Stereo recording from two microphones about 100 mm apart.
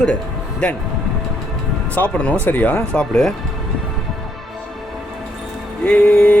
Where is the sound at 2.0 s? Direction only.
10° left (ahead or behind).